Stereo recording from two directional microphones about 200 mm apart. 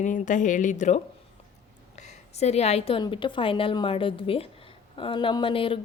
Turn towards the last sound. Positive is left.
turn(degrees=25)  # may be behind; listen again after turning